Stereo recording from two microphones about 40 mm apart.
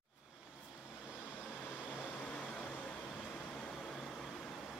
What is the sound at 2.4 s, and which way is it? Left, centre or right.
Vehicle, left.